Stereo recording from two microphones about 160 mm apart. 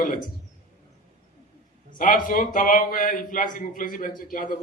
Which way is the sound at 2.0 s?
55° left (ahead or behind).